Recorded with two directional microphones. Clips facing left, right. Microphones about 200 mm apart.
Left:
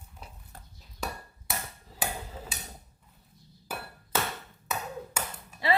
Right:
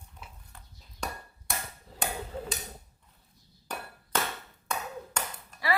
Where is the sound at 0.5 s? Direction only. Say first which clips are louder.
Left 6 dB; 40° left (ahead or behind).